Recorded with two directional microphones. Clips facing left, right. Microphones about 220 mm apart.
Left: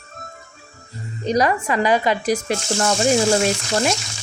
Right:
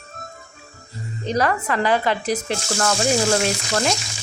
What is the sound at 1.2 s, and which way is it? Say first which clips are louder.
Speech: left 3 dB; 15° left (ahead or behind).